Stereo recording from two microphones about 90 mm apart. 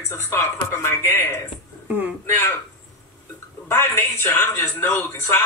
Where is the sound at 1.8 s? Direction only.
20° right (ahead or behind).